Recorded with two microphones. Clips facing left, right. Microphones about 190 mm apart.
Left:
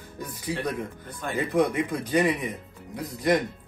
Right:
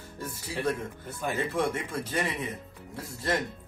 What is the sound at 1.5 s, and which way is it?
Speech, 15° left (ahead or behind).